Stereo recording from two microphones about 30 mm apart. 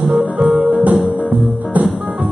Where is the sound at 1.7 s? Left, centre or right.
Right.